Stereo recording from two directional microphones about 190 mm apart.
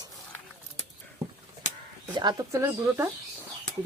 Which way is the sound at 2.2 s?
20° right (ahead or behind).